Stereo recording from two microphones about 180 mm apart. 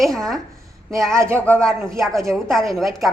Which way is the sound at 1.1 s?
15° right (ahead or behind).